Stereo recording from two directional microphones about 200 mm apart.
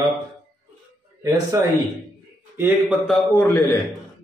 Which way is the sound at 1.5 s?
15° right (ahead or behind).